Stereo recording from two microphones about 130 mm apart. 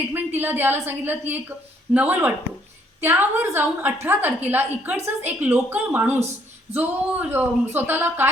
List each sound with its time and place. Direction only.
0.3 s a woman's voice: 15° right (ahead or behind)